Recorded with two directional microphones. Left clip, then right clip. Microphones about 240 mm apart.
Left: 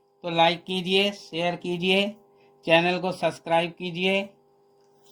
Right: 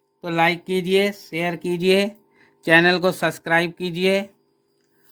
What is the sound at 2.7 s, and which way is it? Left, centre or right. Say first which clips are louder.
Speech: right 6 dB; right.